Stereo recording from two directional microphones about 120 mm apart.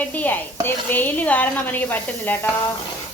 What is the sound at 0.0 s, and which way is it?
Speech, 15° left (ahead or behind).